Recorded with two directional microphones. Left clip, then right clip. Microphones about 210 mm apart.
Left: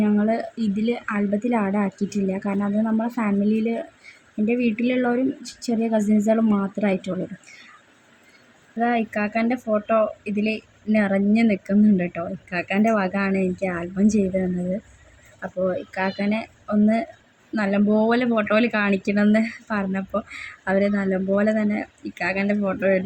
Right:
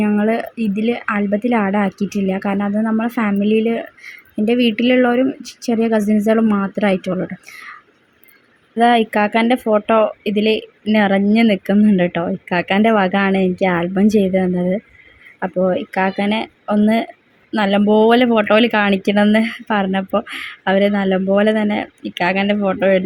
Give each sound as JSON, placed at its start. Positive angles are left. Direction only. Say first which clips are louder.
{"t": 0.0, "sound": "speech", "louder": "right 5 dB", "side_deg": -15}
{"t": 8.8, "sound": "speech", "louder": "right 9 dB", "side_deg": -20}